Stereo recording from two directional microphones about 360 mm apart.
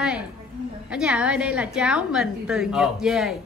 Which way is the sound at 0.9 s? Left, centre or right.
Centre.